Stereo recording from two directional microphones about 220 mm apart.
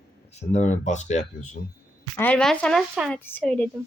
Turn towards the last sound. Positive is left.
turn(degrees=5)  # may be behind; listen again after turning